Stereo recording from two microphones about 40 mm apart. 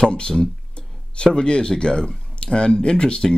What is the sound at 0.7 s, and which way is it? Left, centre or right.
Speech, left.